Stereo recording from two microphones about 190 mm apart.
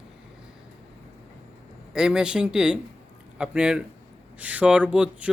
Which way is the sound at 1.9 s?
5° right (ahead or behind).